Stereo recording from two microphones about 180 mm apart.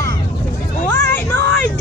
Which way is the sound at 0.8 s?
15° left (ahead or behind).